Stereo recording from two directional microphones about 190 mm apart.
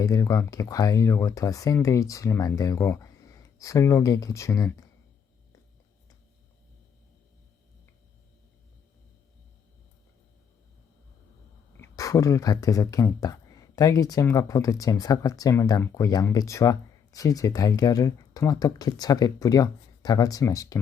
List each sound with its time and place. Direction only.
0.0 s speech: 15° left (ahead or behind)
11.8 s speech: 15° left (ahead or behind)